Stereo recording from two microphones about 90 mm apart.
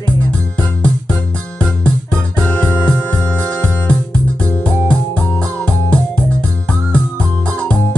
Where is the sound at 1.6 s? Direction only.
10° left (ahead or behind).